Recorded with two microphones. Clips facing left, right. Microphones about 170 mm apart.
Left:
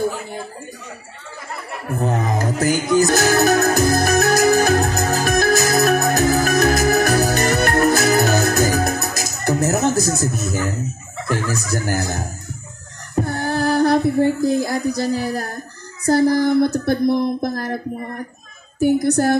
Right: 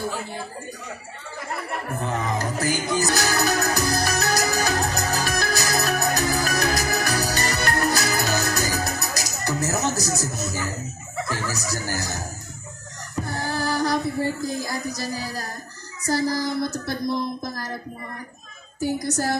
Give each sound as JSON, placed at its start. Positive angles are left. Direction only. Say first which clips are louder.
{"t": 2.0, "sound": "speech", "louder": "left 6 dB", "side_deg": 40}
{"t": 3.1, "sound": "music", "louder": "left 8 dB", "side_deg": 50}
{"t": 10.2, "sound": "speech", "louder": "left 7 dB", "side_deg": 55}
{"t": 13.2, "sound": "music", "louder": "left 7 dB", "side_deg": 60}
{"t": 14.2, "sound": "speech", "louder": "left 9 dB", "side_deg": 60}